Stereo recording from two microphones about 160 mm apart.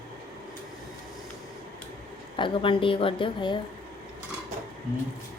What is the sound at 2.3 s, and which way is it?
A woman's voice, 30° left (ahead or behind).